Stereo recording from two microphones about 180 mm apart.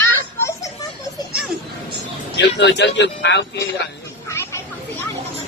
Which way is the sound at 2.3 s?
70° left (ahead or behind).